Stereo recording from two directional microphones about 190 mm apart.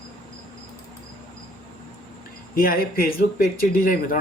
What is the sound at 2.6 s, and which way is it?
Speech, 50° left (ahead or behind).